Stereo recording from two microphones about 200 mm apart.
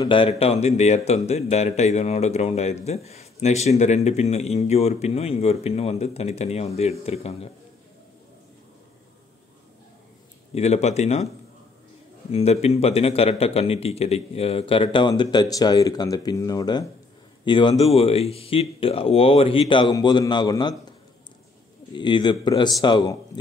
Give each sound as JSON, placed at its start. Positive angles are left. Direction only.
{"t": 0.0, "sound": "speech", "side_deg": 25}
{"t": 10.5, "sound": "speech", "side_deg": 30}
{"t": 12.3, "sound": "speech", "side_deg": 30}
{"t": 21.9, "sound": "speech", "side_deg": 20}